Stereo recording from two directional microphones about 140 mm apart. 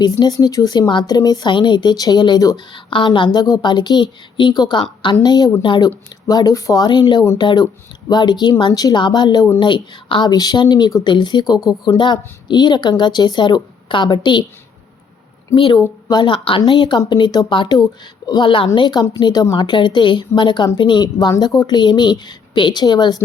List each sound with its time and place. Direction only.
0.0 s a woman's voice: 25° left (ahead or behind)
15.5 s a woman's voice: 35° left (ahead or behind)